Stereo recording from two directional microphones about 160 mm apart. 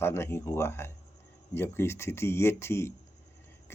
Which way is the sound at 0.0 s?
15° left (ahead or behind).